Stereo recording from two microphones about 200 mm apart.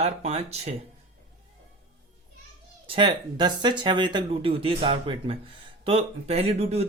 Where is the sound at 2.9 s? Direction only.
25° right (ahead or behind).